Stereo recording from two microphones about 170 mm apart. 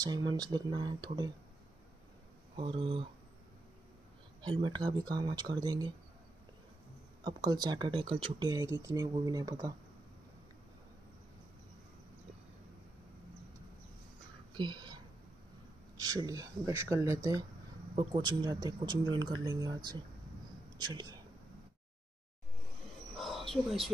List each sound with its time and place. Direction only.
0.0 s speech: 25° right (ahead or behind)
2.5 s speech: 30° right (ahead or behind)
4.4 s speech: 25° right (ahead or behind)
7.2 s speech: 25° right (ahead or behind)
14.5 s a sound: 25° right (ahead or behind)
16.0 s speech: 20° right (ahead or behind)
23.1 s bird: centre (ahead or behind)